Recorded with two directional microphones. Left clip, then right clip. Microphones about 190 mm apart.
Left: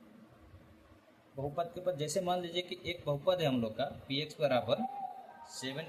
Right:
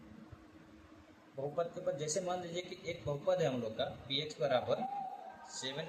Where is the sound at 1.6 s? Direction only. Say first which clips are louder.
Left 2 dB; 55° left (ahead or behind).